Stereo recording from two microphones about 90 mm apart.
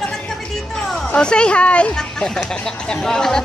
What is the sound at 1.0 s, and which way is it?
Speech, 10° left (ahead or behind).